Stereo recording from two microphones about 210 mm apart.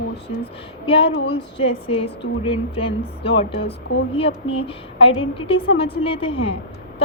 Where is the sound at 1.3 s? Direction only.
25° left (ahead or behind).